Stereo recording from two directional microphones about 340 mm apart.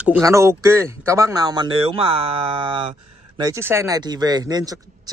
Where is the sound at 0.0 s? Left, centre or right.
Centre.